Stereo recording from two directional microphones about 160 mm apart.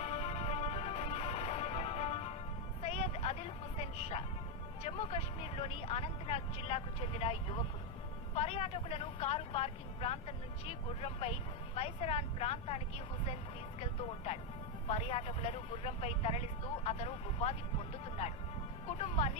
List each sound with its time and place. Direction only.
0.0 s music: 40° left (ahead or behind)
2.8 s vehicle: 40° left (ahead or behind)
4.8 s speech: 40° left (ahead or behind)
14.8 s speech: 40° left (ahead or behind)
18.9 s speech: 40° left (ahead or behind)